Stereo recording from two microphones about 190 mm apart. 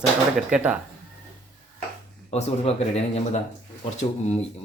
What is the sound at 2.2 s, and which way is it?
Speech, 30° left (ahead or behind).